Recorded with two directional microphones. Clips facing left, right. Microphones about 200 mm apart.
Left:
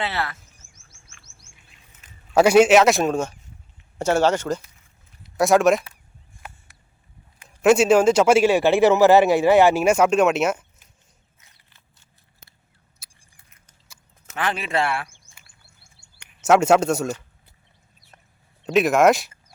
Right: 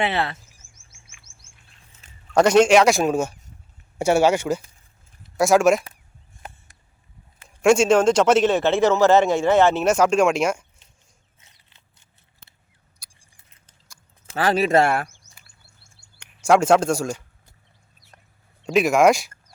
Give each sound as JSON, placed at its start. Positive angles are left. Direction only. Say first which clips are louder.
{"t": 0.0, "sound": "speech", "louder": "right 4 dB", "side_deg": -20}
{"t": 2.3, "sound": "speech", "louder": "left 1 dB", "side_deg": 5}
{"t": 7.4, "sound": "a man's voice", "louder": "even", "side_deg": 5}
{"t": 13.0, "sound": "a sound", "louder": "even", "side_deg": 5}
{"t": 14.3, "sound": "speech", "louder": "right 6 dB", "side_deg": -40}
{"t": 16.4, "sound": "speech", "louder": "even", "side_deg": 5}
{"t": 18.1, "sound": "a sound", "louder": "even", "side_deg": 5}
{"t": 18.6, "sound": "speech", "louder": "even", "side_deg": 0}